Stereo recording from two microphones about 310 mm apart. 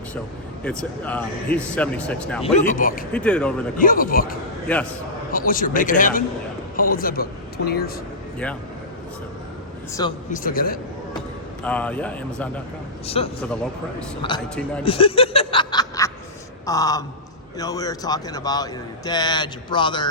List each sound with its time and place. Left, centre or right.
0.6 s speech: centre
2.4 s speech: left
3.1 s speech: centre
3.8 s speech: left
4.7 s speech: centre
5.5 s a man's voice: left
10.0 s speech: centre
10.3 s speech: left
11.6 s speech: centre
13.1 s speech: centre